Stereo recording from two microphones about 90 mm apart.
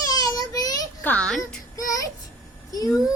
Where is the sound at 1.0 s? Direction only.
15° left (ahead or behind).